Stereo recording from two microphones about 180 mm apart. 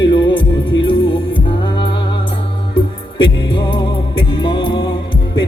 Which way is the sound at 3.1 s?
25° left (ahead or behind).